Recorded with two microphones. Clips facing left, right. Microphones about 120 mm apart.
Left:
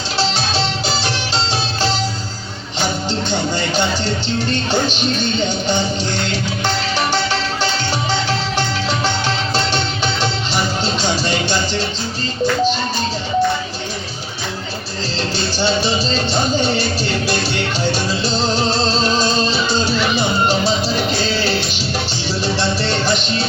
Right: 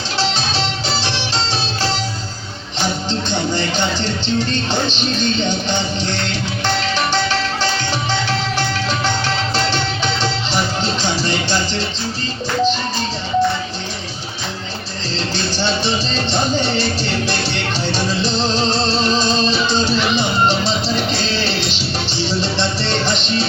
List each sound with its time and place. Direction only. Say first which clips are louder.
0.2 s music: left 1 dB; 15° left (ahead or behind)
3.1 s music: even; 10° left (ahead or behind)
4.7 s music: left 2 dB; 15° left (ahead or behind)
15.1 s music: even; 15° left (ahead or behind)
17.9 s music: even; 10° left (ahead or behind)